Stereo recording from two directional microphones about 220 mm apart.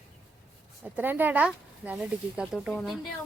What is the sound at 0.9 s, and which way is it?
Speech, 10° right (ahead or behind).